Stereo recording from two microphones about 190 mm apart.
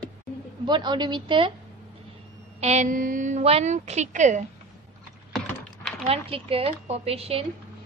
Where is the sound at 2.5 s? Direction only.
35° right (ahead or behind).